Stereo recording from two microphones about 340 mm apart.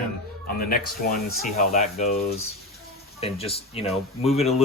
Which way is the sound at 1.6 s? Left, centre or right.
Centre.